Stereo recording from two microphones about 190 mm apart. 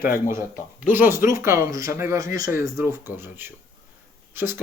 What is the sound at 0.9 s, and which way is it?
Speech, 10° right (ahead or behind).